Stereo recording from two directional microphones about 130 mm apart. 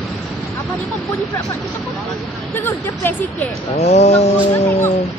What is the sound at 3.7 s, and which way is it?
Speech, 60° left (ahead or behind).